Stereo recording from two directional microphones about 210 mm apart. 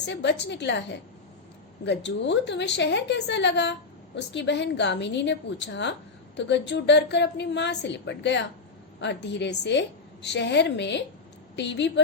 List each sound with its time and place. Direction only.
0.0 s a woman's voice: 55° left (ahead or behind)